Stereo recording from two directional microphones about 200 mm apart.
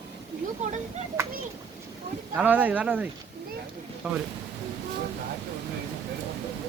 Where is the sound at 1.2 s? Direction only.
10° right (ahead or behind).